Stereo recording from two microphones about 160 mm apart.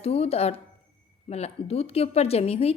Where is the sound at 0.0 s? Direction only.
40° left (ahead or behind).